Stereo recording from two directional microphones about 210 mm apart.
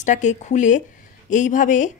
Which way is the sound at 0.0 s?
35° left (ahead or behind).